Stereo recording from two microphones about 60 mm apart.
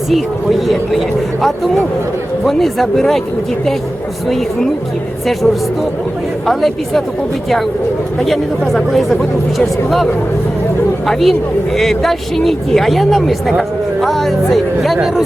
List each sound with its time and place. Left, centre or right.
0.7 s speech: centre
6.5 s speech: centre
8.2 s speech: centre